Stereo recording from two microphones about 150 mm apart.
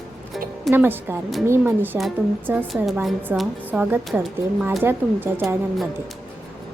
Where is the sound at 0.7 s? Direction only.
15° right (ahead or behind).